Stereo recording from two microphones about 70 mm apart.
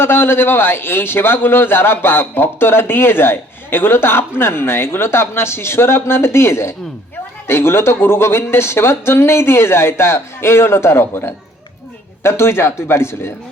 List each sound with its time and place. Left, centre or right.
0.0 s a man's voice: left